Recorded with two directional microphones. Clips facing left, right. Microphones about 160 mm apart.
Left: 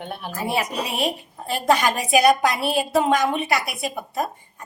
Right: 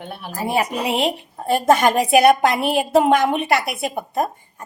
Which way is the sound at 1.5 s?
50° right (ahead or behind).